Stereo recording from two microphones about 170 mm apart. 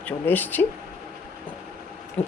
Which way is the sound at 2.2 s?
10° left (ahead or behind).